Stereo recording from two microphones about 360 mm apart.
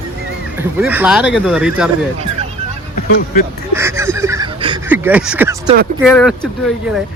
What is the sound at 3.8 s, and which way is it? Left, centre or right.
Honk, centre.